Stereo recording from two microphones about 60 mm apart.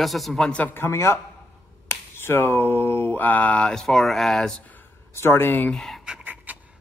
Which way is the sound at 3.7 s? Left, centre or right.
Centre.